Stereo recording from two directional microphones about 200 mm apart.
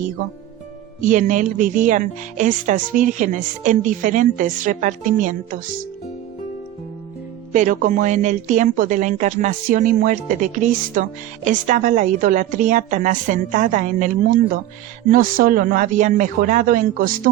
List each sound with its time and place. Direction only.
1.0 s a woman's voice: 40° right (ahead or behind)
7.5 s a woman's voice: 40° right (ahead or behind)